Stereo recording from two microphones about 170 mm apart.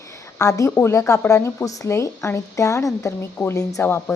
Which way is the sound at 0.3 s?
20° left (ahead or behind).